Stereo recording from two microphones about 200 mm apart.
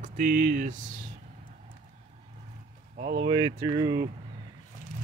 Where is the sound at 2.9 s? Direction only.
55° right (ahead or behind).